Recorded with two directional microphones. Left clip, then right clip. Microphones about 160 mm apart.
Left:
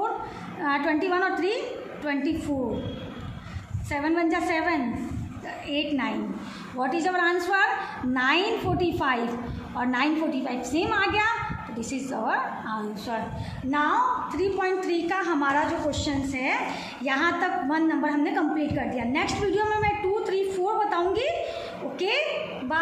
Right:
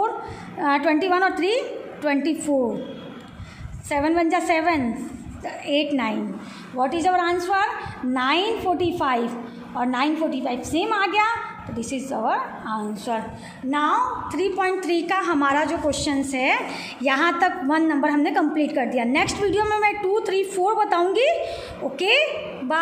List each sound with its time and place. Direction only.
0.6 s a woman's voice: 45° right (ahead or behind)
3.9 s a woman's voice: 40° right (ahead or behind)
13.7 s a woman's voice: 55° right (ahead or behind)